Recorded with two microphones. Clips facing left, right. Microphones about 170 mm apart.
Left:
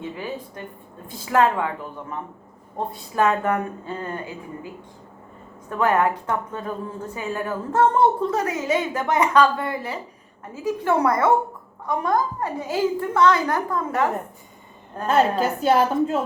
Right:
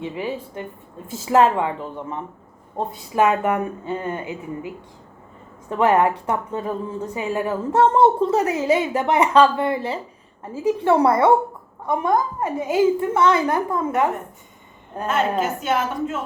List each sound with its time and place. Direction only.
0.0 s a woman's voice: 20° right (ahead or behind)
15.0 s a woman's voice: 35° left (ahead or behind)